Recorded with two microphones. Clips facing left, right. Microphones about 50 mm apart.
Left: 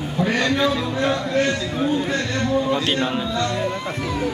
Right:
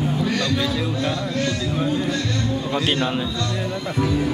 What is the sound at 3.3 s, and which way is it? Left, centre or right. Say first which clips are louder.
Speech: left 3 dB; left.